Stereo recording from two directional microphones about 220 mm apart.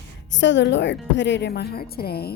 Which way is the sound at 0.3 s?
55° left (ahead or behind).